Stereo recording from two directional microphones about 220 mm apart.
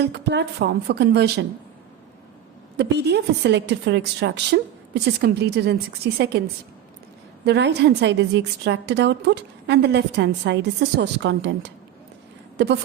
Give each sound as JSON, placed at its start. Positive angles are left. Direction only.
{"t": 0.0, "sound": "a woman's voice", "side_deg": -50}
{"t": 2.7, "sound": "a woman's voice", "side_deg": -50}
{"t": 7.4, "sound": "a woman's voice", "side_deg": -50}